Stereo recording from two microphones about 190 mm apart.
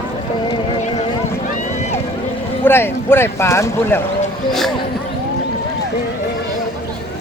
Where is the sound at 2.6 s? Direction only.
10° left (ahead or behind).